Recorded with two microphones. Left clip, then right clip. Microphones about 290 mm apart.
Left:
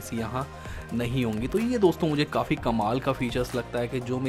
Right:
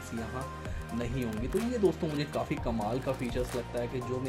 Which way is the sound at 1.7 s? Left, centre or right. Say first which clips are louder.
Left 7 dB; left.